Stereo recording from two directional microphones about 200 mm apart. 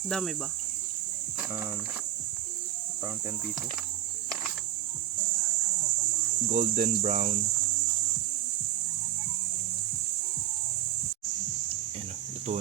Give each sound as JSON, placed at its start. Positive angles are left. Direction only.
{"t": 0.1, "sound": "speech", "side_deg": 0}
{"t": 6.5, "sound": "cricket", "side_deg": -35}